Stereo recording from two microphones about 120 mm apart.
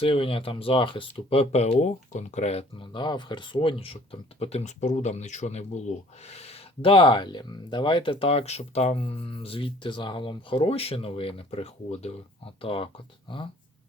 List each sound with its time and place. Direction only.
0.0 s speech: 50° left (ahead or behind)
12.6 s speech: 50° left (ahead or behind)